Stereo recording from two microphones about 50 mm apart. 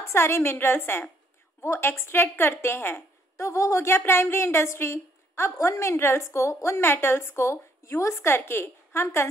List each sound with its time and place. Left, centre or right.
0.1 s a woman's voice: left
3.3 s a woman's voice: left